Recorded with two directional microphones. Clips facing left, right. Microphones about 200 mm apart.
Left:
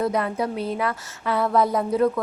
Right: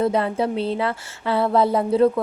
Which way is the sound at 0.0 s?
25° right (ahead or behind).